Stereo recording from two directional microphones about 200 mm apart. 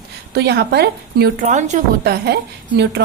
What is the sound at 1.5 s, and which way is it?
Speech, 35° right (ahead or behind).